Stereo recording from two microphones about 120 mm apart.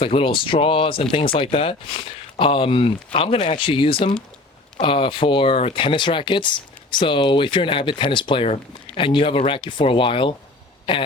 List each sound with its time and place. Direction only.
0.0 s speech: 50° left (ahead or behind)